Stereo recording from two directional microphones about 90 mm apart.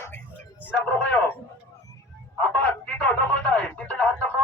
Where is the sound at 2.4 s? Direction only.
15° left (ahead or behind).